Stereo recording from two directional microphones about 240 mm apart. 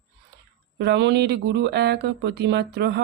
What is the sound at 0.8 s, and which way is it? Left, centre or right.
Speech, right.